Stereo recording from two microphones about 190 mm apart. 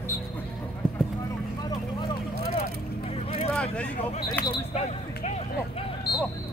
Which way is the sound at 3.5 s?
5° left (ahead or behind).